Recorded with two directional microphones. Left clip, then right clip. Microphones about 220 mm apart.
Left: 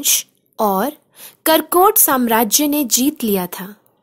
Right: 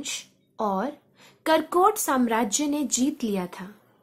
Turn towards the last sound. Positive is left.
turn(degrees=50)  # may be behind; listen again after turning